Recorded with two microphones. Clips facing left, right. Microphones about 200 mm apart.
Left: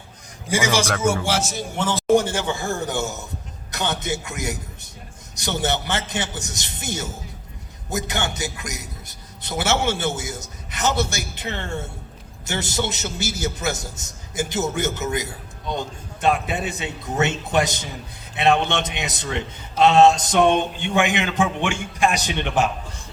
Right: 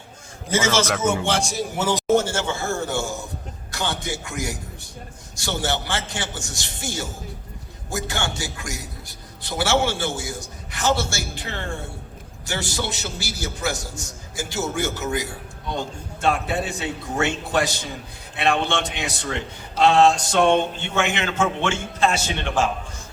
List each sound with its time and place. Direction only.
0.5 s a man's voice: 15° left (ahead or behind); by 2.0 s 10° right (ahead or behind)
2.0 s a man's voice: 15° left (ahead or behind)